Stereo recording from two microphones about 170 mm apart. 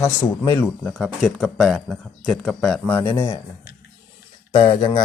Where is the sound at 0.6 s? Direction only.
Centre (ahead or behind).